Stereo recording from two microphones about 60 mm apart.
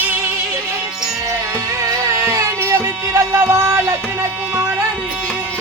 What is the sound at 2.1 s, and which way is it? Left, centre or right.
Music, right.